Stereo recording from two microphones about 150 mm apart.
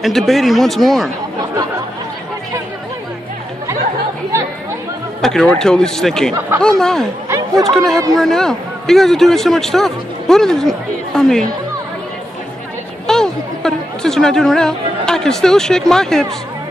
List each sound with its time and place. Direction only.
0.0 s a man's voice: centre (ahead or behind)
5.2 s a man's voice: 5° left (ahead or behind)
7.2 s chatter: 20° right (ahead or behind)
7.7 s a man's voice: 5° left (ahead or behind)
13.0 s a man's voice: 5° left (ahead or behind)